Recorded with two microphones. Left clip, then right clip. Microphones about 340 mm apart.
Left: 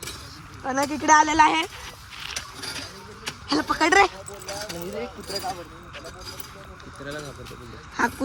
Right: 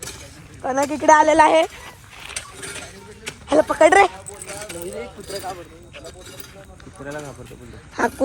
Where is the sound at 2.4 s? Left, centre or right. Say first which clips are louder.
Right 3 dB; left.